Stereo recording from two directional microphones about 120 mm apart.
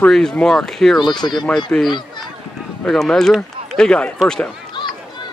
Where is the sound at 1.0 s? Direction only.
40° left (ahead or behind).